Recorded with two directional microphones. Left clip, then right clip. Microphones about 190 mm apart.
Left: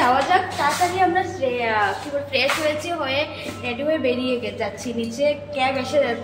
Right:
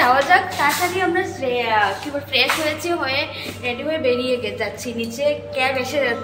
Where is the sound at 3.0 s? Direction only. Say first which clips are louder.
Right 1 dB; 10° right (ahead or behind).